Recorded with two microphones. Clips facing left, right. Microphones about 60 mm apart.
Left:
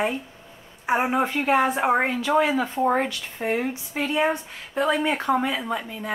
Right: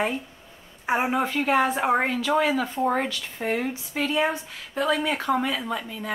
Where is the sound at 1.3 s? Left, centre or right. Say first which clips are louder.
Left 1 dB; centre.